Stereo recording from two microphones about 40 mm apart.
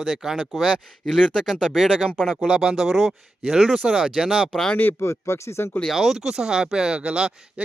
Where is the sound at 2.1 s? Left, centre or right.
Centre.